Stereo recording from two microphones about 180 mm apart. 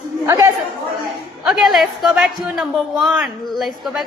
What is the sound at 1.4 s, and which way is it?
A man's voice, centre (ahead or behind).